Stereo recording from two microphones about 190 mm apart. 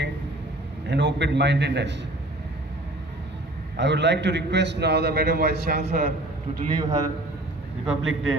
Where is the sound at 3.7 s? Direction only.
65° right (ahead or behind).